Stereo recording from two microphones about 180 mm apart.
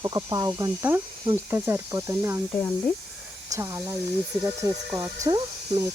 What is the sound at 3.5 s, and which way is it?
Speech, 15° right (ahead or behind).